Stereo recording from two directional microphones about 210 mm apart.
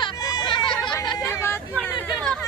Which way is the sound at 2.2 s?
5° left (ahead or behind).